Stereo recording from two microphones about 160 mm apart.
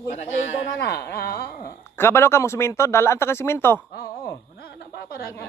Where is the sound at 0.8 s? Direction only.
90° left.